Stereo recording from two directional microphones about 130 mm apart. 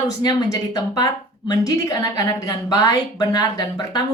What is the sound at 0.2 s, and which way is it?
A woman's voice, 30° left (ahead or behind).